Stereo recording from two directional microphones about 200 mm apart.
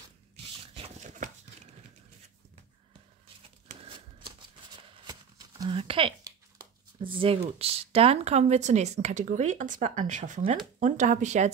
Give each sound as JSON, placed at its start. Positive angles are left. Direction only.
{"t": 0.7, "sound": "chopping", "side_deg": -40}
{"t": 3.8, "sound": "shuffling cards", "side_deg": -25}
{"t": 5.6, "sound": "a sound", "side_deg": -25}
{"t": 7.0, "sound": "speech", "side_deg": -25}